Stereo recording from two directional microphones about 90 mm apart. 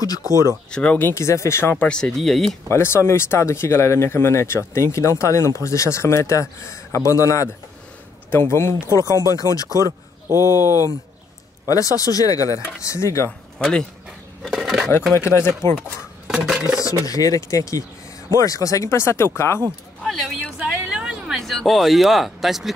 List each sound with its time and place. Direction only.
0.0 s speech: 40° left (ahead or behind)
0.7 s speech: 10° left (ahead or behind)
0.9 s speech: 25° left (ahead or behind)
1.8 s speech: 10° left (ahead or behind)
2.7 s speech: 30° left (ahead or behind)
9.8 s speech: 35° right (ahead or behind)
11.6 s speech: 40° left (ahead or behind)
13.6 s speech: 5° left (ahead or behind)
15.1 s speech: 30° left (ahead or behind)
16.4 s speech: 5° right (ahead or behind)
16.8 s speech: 40° left (ahead or behind)
20.0 s a sound: 5° left (ahead or behind)
20.5 s a sound: 10° right (ahead or behind)
21.4 s speech: 5° left (ahead or behind)